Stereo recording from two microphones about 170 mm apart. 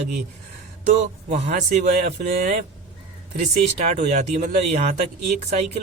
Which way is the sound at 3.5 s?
40° right (ahead or behind).